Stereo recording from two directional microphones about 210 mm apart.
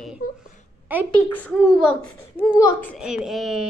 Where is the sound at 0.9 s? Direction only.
10° right (ahead or behind).